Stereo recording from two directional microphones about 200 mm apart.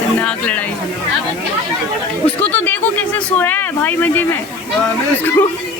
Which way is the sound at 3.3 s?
10° left (ahead or behind).